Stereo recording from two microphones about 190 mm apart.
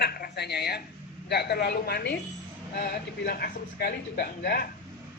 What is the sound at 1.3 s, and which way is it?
Speech, 60° left (ahead or behind).